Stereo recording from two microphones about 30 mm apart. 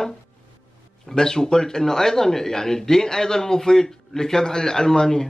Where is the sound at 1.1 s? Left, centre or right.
Left.